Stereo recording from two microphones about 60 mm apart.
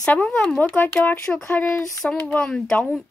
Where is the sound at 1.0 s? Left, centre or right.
Left.